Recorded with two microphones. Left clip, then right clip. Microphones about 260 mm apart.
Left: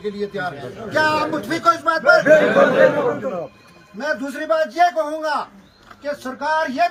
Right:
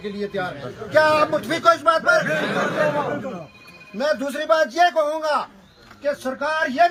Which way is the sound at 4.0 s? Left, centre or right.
Centre.